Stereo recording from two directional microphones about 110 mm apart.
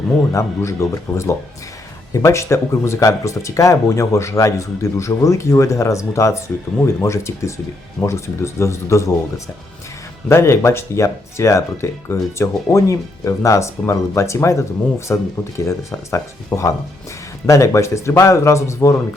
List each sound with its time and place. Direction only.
0.2 s speech: 25° left (ahead or behind)
10.2 s speech: 25° left (ahead or behind)